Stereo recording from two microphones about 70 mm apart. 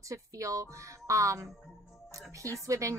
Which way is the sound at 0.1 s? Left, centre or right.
Right.